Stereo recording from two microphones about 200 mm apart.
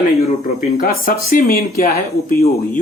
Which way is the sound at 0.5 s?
40° left (ahead or behind).